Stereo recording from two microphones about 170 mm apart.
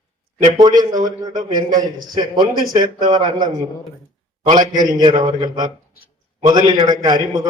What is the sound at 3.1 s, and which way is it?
Speech, 25° right (ahead or behind).